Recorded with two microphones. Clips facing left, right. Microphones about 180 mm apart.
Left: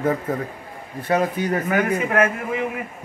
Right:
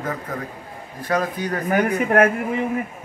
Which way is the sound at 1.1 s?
20° left (ahead or behind).